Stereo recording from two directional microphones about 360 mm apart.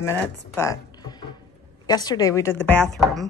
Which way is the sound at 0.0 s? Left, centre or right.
Centre.